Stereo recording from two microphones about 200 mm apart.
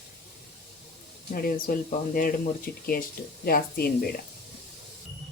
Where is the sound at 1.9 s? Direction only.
45° left (ahead or behind).